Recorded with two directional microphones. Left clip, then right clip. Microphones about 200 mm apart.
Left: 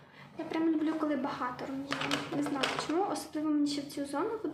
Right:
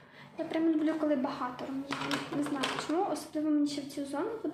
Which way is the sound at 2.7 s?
10° left (ahead or behind).